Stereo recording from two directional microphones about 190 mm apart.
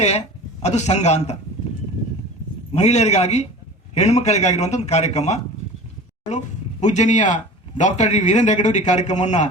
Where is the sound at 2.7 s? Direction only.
35° left (ahead or behind).